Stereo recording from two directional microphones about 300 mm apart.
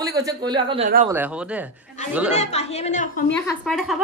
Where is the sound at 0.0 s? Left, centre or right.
Centre.